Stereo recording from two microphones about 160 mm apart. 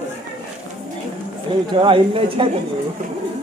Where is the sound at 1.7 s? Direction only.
30° right (ahead or behind).